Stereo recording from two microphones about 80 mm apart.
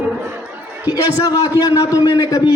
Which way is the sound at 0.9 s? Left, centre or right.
Left.